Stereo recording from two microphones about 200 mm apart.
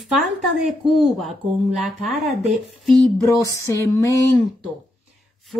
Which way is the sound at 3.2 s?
15° left (ahead or behind).